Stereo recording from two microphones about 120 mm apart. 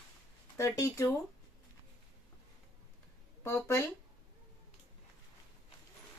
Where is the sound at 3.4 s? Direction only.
20° left (ahead or behind).